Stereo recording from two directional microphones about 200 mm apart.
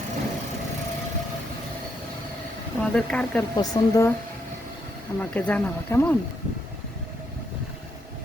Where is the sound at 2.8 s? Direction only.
5° left (ahead or behind).